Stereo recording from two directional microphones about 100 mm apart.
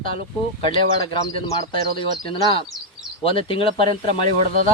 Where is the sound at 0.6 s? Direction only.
60° left (ahead or behind).